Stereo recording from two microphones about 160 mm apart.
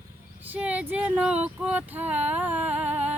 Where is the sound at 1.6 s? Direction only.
10° right (ahead or behind).